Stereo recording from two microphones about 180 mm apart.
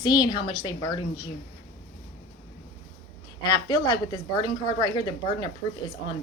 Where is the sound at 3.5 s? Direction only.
25° left (ahead or behind).